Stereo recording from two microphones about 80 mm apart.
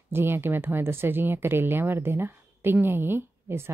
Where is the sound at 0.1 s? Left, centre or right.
Right.